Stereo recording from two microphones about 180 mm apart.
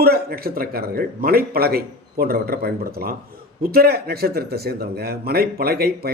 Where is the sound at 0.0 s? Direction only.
60° right (ahead or behind).